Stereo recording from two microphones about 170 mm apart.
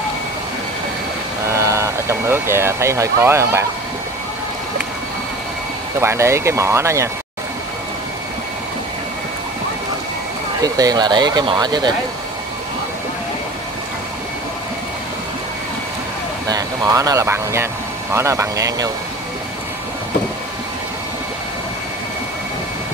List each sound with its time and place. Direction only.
1.5 s speech: 15° right (ahead or behind)
5.9 s speech: 15° right (ahead or behind)
10.6 s speech: 20° right (ahead or behind)
16.4 s speech: 20° right (ahead or behind)